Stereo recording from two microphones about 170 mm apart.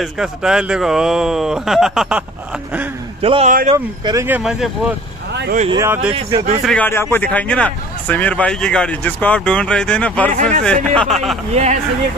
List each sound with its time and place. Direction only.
0.0 s speech: 5° right (ahead or behind)
3.2 s a man's voice: 35° right (ahead or behind)
3.7 s speech: 20° right (ahead or behind)
4.4 s speech: 5° right (ahead or behind)
5.7 s speech: 15° right (ahead or behind)
6.6 s speech: 5° left (ahead or behind)
10.3 s speech: 50° right (ahead or behind)
10.6 s speech: 5° left (ahead or behind)
11.5 s speech: 40° right (ahead or behind)